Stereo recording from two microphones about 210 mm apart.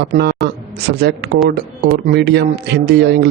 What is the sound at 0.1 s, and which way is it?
Speech, 50° right (ahead or behind).